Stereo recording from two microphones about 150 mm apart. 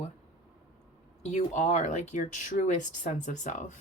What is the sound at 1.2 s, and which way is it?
Speech, 50° left (ahead or behind).